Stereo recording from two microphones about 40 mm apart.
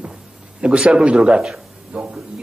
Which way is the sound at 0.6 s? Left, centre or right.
Right.